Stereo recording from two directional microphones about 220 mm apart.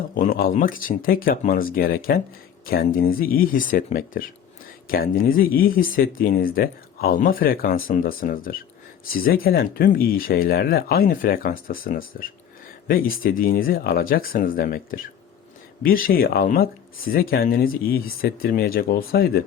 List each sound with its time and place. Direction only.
0.1 s speech: 40° left (ahead or behind)